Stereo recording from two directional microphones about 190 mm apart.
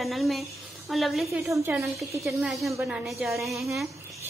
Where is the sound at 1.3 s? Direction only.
15° right (ahead or behind).